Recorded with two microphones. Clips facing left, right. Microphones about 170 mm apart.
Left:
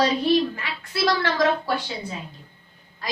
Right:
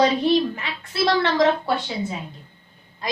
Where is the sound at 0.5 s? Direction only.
25° right (ahead or behind).